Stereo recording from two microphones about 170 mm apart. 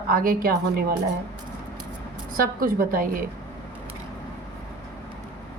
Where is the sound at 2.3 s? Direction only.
55° right (ahead or behind).